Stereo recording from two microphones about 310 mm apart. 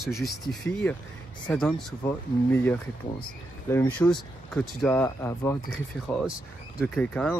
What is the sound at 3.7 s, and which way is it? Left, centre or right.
Speech, centre.